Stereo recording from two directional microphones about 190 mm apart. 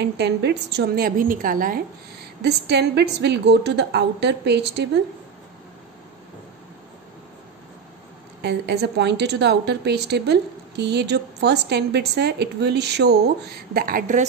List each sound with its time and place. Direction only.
0.0 s a woman's voice: 60° right (ahead or behind)
2.4 s a woman's voice: 60° right (ahead or behind)
8.4 s a woman's voice: 60° right (ahead or behind)
13.7 s a woman's voice: 50° right (ahead or behind)